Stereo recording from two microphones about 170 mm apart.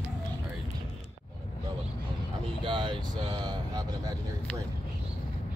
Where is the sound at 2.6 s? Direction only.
30° right (ahead or behind).